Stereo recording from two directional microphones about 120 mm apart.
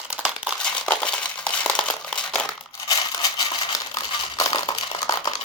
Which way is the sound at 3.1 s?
35° left (ahead or behind).